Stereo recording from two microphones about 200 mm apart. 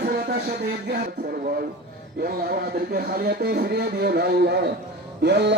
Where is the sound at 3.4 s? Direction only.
50° right (ahead or behind).